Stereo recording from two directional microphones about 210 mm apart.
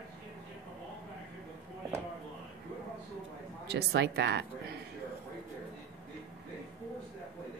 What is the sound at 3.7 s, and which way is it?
Speech, 50° right (ahead or behind).